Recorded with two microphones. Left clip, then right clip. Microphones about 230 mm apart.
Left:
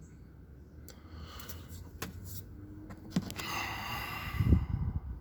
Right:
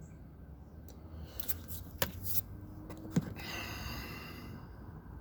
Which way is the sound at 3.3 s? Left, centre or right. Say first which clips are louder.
Left 6 dB; left.